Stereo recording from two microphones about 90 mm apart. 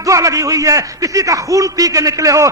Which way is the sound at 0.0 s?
40° right (ahead or behind).